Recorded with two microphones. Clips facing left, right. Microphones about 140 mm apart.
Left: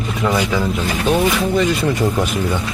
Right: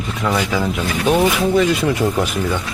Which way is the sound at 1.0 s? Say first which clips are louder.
Right 2 dB; 5° right (ahead or behind).